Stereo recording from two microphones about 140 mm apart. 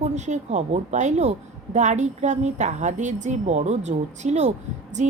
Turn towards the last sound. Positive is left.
turn(degrees=-55)  # may be behind; listen again after turning